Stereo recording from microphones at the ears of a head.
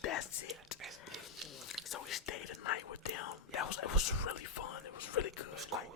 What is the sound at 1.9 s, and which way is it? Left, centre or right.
Whispering, left.